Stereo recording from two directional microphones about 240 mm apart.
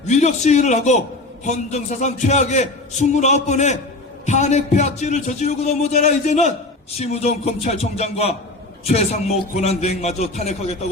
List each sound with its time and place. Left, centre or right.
0.1 s a man's voice: left